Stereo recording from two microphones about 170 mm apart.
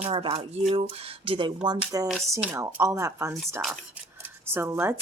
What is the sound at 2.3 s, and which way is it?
Speech, 15° right (ahead or behind).